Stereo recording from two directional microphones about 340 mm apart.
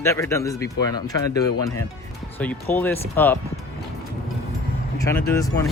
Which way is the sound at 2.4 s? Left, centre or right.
Centre.